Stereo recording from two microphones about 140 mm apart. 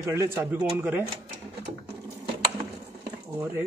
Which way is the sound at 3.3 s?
15° right (ahead or behind).